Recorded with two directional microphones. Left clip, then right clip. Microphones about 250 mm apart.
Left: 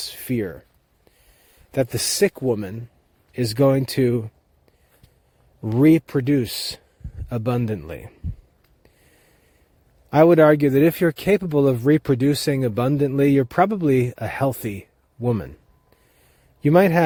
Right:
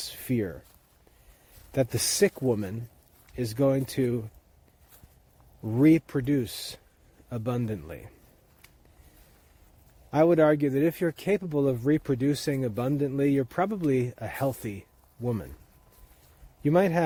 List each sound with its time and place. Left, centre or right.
0.0 s a sound: left
1.7 s speech: left
5.6 s speech: left
10.1 s speech: left
16.6 s speech: left